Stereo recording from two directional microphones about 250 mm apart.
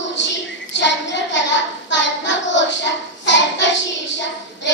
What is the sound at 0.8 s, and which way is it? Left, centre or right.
Child singing, left.